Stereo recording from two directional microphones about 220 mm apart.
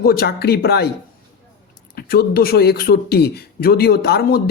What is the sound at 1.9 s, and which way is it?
Speech, 45° left (ahead or behind).